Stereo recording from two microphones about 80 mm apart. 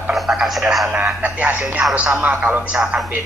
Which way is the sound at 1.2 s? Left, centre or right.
Centre.